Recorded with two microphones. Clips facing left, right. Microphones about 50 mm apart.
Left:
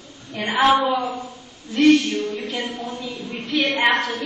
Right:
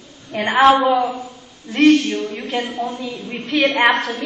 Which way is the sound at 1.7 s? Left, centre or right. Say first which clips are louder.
Right 2 dB; right.